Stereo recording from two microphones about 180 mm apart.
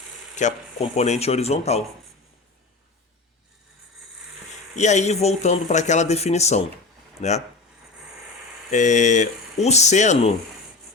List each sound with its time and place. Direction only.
0.3 s speech: 40° left (ahead or behind)
4.8 s speech: 40° left (ahead or behind)
8.7 s speech: 40° left (ahead or behind)